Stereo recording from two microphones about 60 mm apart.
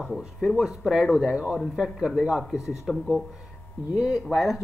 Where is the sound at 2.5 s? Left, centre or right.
Left.